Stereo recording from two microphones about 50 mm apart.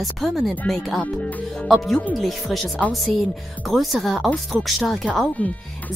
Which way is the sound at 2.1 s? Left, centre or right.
Centre.